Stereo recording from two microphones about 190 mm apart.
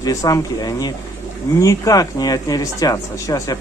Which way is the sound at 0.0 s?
20° left (ahead or behind).